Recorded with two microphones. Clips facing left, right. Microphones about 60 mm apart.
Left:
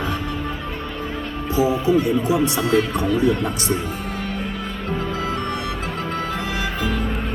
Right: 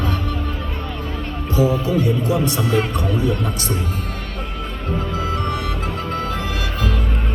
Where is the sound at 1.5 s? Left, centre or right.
Centre.